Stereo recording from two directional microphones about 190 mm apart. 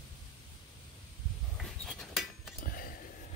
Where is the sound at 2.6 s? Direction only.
50° left (ahead or behind).